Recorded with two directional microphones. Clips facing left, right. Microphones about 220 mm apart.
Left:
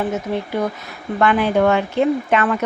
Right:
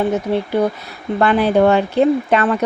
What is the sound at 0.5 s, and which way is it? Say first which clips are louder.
Speech: right 5 dB; 30° right (ahead or behind).